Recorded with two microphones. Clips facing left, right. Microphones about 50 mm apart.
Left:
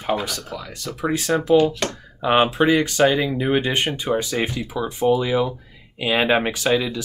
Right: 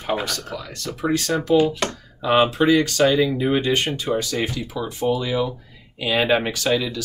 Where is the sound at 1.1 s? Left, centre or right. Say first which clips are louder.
Left 1 dB; centre.